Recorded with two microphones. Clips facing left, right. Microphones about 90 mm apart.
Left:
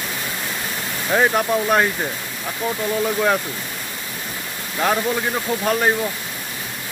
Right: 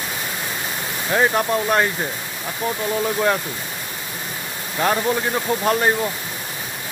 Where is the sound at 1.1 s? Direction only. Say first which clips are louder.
Left 1 dB; centre (ahead or behind).